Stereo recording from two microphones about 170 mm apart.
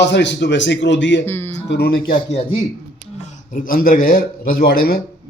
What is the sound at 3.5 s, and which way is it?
Speech, 55° left (ahead or behind).